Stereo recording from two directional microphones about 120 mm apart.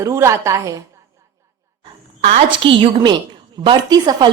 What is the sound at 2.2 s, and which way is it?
Speech, 65° right (ahead or behind).